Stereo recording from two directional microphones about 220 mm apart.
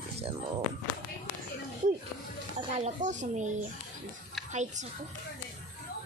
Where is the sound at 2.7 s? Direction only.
30° right (ahead or behind).